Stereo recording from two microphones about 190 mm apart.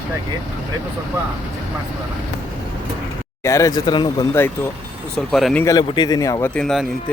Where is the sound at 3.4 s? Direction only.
15° left (ahead or behind).